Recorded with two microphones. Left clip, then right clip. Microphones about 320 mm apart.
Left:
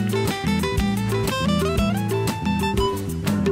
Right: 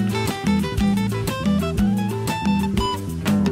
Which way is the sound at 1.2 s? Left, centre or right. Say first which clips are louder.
Left 2 dB; centre.